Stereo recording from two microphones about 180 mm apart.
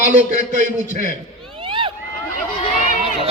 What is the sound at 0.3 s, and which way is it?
Speech, 40° right (ahead or behind).